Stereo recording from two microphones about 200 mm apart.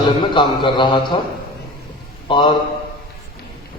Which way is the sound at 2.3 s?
25° left (ahead or behind).